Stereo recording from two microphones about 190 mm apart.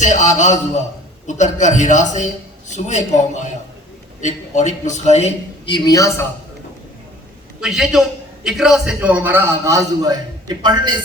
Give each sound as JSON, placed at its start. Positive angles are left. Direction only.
{"t": 0.0, "sound": "a man's voice", "side_deg": 40}
{"t": 7.6, "sound": "a man's voice", "side_deg": 0}